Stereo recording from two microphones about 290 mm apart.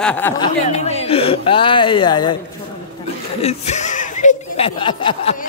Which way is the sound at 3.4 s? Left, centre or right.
Left.